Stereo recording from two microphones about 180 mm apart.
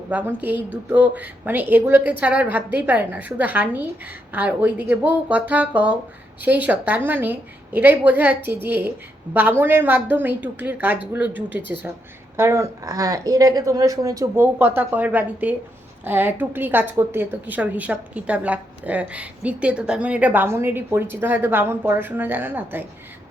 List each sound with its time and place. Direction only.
0.1 s a woman's voice: 10° right (ahead or behind)